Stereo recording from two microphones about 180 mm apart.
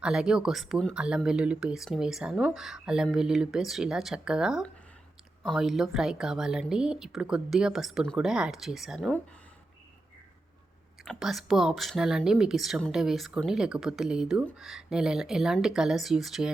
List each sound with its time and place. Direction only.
0.0 s speech: 5° right (ahead or behind)
11.0 s speech: centre (ahead or behind)